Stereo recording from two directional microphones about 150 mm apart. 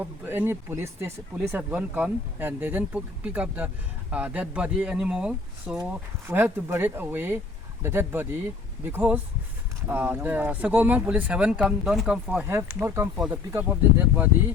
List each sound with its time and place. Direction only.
0.0 s speech: 15° right (ahead or behind)
12.4 s speech: 15° right (ahead or behind)
13.1 s speech: 10° right (ahead or behind)